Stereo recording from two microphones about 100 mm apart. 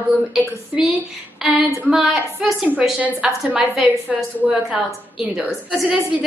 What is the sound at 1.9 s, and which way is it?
A woman's voice, 5° right (ahead or behind).